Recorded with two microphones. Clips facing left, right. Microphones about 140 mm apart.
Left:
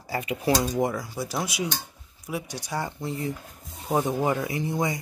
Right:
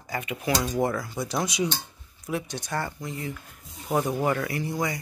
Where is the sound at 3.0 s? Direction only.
35° left (ahead or behind).